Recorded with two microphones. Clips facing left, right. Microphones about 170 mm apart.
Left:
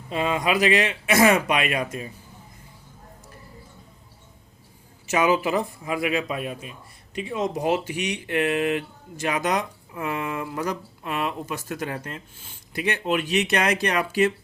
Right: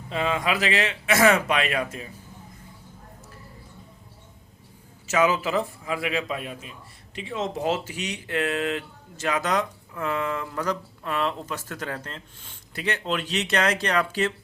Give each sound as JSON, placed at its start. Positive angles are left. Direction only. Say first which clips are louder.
{"t": 0.1, "sound": "a man's voice", "louder": "left 2 dB", "side_deg": 20}
{"t": 5.0, "sound": "a man's voice", "louder": "left 1 dB", "side_deg": 15}